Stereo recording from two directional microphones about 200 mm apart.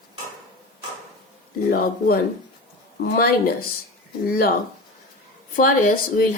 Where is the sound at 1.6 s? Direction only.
45° left (ahead or behind).